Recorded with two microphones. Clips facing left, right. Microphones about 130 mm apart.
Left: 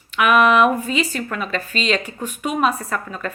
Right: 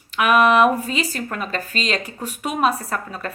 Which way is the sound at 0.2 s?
35° right (ahead or behind).